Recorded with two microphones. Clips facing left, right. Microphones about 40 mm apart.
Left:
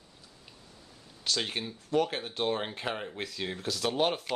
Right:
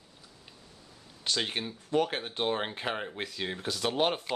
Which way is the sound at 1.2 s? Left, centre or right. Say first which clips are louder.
Right 1 dB; centre.